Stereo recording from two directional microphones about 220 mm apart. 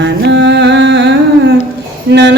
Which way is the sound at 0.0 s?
50° right (ahead or behind).